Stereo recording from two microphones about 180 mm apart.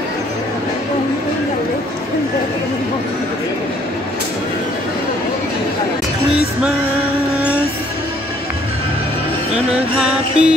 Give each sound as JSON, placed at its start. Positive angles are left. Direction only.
{"t": 10.4, "sound": "music", "side_deg": -5}